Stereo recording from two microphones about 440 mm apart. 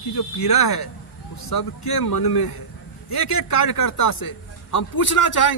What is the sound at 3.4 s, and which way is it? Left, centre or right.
Speech, left.